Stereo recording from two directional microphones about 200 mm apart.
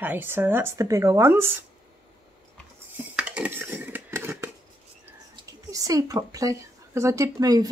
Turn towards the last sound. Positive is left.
turn(degrees=-20)  # may be behind; listen again after turning